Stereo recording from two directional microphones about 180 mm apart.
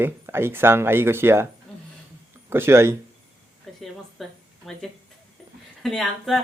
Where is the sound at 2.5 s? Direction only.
15° right (ahead or behind).